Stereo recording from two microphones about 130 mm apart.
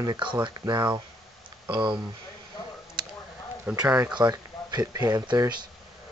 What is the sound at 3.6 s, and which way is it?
Speech, 10° right (ahead or behind).